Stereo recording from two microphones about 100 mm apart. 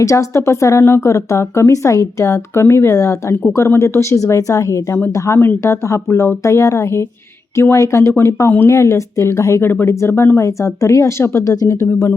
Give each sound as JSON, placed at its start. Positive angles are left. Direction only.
{"t": 0.0, "sound": "speech", "side_deg": 30}